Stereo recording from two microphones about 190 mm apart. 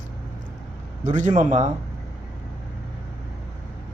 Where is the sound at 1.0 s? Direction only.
40° right (ahead or behind).